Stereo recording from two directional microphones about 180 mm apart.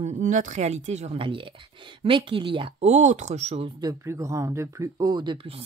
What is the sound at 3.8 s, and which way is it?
Speech, 20° right (ahead or behind).